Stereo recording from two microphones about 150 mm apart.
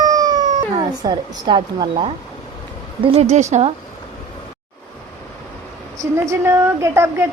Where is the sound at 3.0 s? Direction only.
45° right (ahead or behind).